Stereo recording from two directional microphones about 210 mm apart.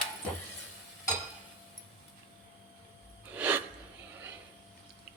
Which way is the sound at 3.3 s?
10° right (ahead or behind).